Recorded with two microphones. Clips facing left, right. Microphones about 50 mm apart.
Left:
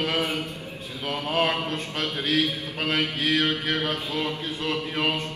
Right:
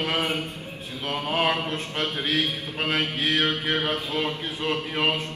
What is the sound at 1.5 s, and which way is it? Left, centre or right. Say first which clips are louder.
Mantra: right 1 dB; right.